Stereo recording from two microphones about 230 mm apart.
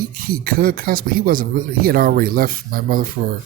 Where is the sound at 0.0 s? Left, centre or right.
Right.